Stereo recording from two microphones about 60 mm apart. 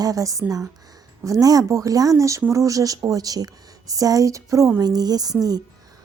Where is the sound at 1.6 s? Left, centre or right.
Right.